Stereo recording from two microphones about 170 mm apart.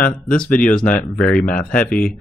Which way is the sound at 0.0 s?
10° left (ahead or behind).